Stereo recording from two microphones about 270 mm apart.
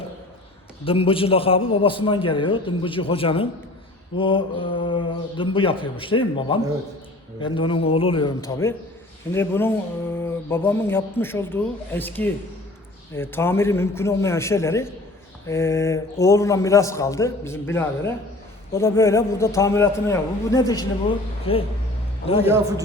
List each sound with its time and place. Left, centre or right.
0.9 s a man's voice: centre
9.3 s a sound: centre
21.5 s a man's voice: left